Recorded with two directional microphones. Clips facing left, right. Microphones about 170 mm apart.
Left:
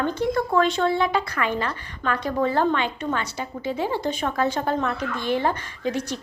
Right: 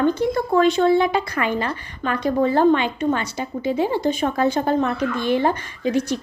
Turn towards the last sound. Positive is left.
turn(degrees=-15)  # may be behind; listen again after turning